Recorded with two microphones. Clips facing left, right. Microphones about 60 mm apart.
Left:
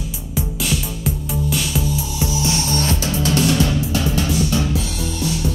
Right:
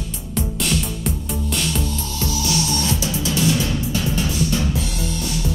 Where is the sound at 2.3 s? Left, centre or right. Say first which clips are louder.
Right 1 dB; left.